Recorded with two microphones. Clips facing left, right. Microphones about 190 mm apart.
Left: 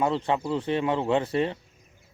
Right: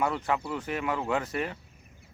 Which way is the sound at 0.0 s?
25° left (ahead or behind).